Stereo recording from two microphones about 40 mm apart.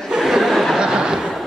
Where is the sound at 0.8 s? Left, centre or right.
Centre.